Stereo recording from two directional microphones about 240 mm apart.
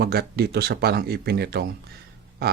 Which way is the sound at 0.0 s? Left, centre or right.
Right.